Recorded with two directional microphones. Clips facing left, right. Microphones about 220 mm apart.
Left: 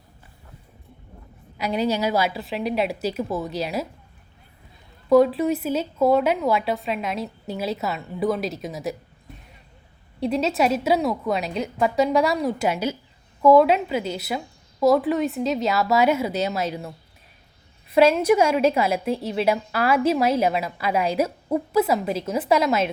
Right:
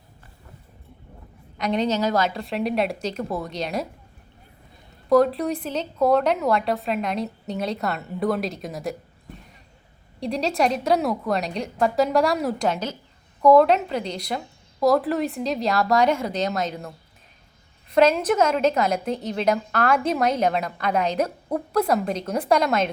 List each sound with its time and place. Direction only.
1.5 s speech: 5° left (ahead or behind)
5.0 s speech: centre (ahead or behind)
10.2 s a woman's voice: centre (ahead or behind)